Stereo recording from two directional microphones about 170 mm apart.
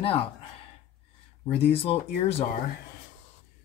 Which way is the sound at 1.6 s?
35° left (ahead or behind).